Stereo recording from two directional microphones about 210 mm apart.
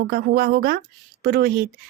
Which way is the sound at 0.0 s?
45° right (ahead or behind).